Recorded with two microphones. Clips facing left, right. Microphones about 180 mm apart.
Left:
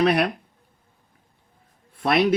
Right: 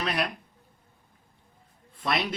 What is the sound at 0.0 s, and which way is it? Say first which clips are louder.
Speech: left 10 dB; 60° left (ahead or behind).